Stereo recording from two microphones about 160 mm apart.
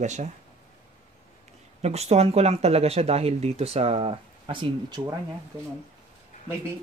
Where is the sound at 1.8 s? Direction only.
40° right (ahead or behind).